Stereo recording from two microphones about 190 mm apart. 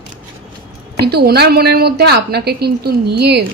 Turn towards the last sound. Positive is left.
turn(degrees=-60)  # may be behind; listen again after turning